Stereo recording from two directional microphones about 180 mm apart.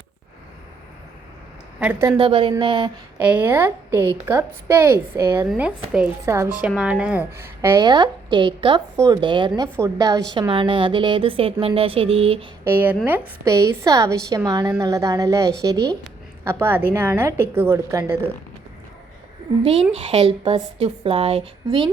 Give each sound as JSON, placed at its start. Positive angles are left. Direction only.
{"t": 1.8, "sound": "a woman's voice", "side_deg": -10}
{"t": 2.1, "sound": "a woman's voice", "side_deg": -30}
{"t": 3.2, "sound": "a woman's voice", "side_deg": -10}
{"t": 7.9, "sound": "a woman's voice", "side_deg": -25}
{"t": 12.6, "sound": "a woman's voice", "side_deg": -10}
{"t": 19.9, "sound": "a woman's voice", "side_deg": -30}